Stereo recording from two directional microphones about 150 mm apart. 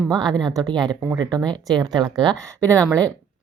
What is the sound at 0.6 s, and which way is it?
A woman's voice, 25° right (ahead or behind).